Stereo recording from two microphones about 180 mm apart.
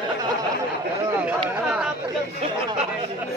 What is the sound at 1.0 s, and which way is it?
Speech, 15° right (ahead or behind).